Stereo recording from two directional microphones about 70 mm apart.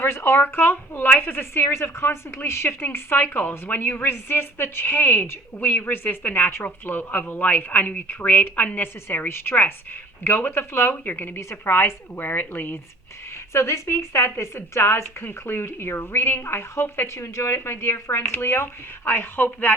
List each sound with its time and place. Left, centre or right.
0.0 s a woman's voice: left
11.3 s a woman's voice: left
13.5 s a woman's voice: left